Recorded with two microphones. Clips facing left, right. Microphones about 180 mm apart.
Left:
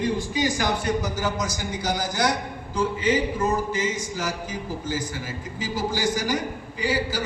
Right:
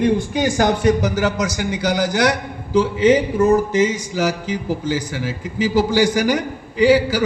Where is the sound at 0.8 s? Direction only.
75° right (ahead or behind).